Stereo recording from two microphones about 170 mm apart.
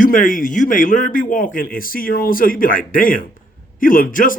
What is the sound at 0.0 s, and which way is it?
Speech, 50° left (ahead or behind).